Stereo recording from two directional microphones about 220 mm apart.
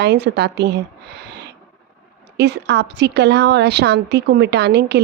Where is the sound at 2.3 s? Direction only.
50° right (ahead or behind).